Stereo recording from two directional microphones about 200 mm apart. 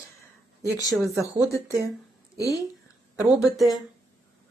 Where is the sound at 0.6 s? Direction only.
15° left (ahead or behind).